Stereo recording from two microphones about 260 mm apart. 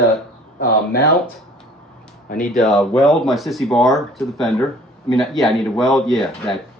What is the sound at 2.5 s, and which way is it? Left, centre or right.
Speech, centre.